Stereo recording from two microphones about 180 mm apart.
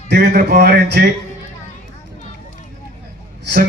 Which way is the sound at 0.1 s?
55° right (ahead or behind).